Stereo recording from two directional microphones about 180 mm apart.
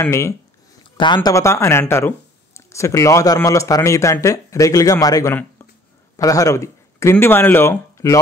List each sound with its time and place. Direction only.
0.0 s speech: 15° left (ahead or behind)
0.9 s speech: 25° left (ahead or behind)